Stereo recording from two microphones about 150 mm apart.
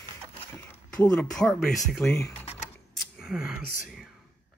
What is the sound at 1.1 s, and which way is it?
Speech, 5° left (ahead or behind).